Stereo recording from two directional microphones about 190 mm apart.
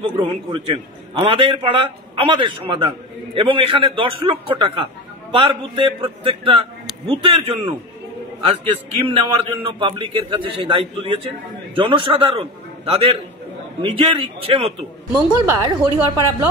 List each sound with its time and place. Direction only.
0.0 s a man's voice: 25° right (ahead or behind)
9.1 s a man's voice: 30° right (ahead or behind)